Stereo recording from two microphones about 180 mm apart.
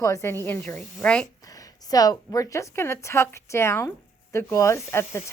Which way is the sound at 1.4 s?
20° left (ahead or behind).